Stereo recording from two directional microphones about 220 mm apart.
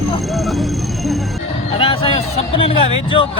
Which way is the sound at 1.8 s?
25° left (ahead or behind).